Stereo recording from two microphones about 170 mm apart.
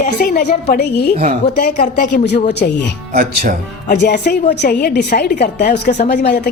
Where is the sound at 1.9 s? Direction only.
90° left.